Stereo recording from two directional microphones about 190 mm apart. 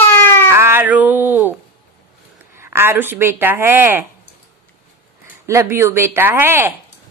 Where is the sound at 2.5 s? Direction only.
10° right (ahead or behind).